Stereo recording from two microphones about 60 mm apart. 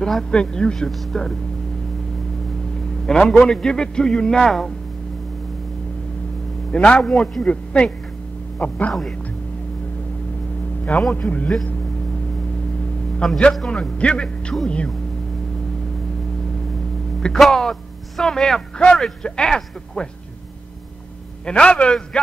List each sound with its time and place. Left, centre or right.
0.0 s a man's voice: centre
3.3 s a man's voice: centre
6.7 s a man's voice: centre
7.4 s speech: centre
11.1 s speech: left
13.2 s a man's voice: centre
17.2 s a man's voice: centre
21.5 s a man's voice: centre